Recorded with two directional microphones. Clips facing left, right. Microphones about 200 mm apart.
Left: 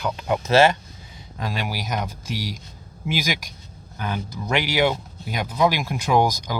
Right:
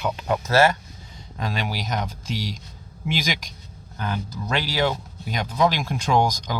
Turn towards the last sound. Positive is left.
turn(degrees=5)  # may be behind; listen again after turning